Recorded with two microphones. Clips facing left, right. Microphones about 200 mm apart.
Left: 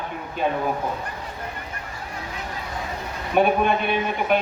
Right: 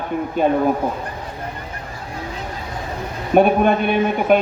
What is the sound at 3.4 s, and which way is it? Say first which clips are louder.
A man's voice: right 5 dB; 50° right (ahead or behind).